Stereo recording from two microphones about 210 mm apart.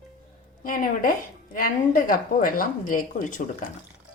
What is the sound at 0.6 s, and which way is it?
A woman's voice, 40° left (ahead or behind).